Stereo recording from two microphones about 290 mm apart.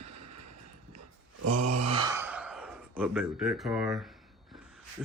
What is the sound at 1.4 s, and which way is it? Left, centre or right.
Groan, right.